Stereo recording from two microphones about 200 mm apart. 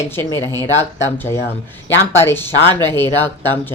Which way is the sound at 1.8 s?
70° left (ahead or behind).